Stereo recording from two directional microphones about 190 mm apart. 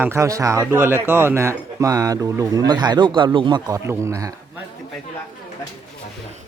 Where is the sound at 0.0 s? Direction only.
15° right (ahead or behind).